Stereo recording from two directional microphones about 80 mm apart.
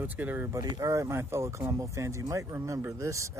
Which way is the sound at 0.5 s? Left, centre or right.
Right.